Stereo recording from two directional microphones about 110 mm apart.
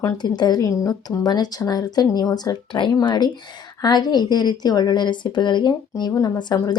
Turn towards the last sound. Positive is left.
turn(degrees=40)  # may be behind; listen again after turning